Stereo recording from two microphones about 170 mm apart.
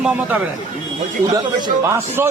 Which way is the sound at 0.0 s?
10° right (ahead or behind).